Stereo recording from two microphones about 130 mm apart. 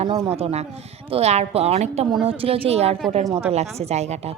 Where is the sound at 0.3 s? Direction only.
55° right (ahead or behind).